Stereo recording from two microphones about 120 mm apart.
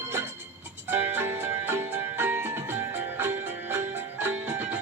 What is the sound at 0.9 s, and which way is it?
Music, 20° right (ahead or behind).